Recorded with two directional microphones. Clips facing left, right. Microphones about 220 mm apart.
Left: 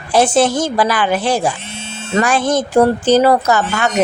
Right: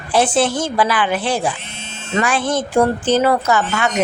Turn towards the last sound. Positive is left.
turn(degrees=40)  # may be behind; listen again after turning